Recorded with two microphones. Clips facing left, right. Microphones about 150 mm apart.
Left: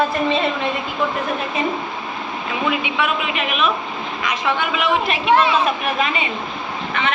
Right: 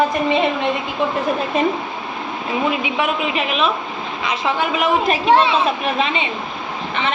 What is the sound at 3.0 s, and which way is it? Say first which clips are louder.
A woman's voice: right 2 dB; 30° right (ahead or behind).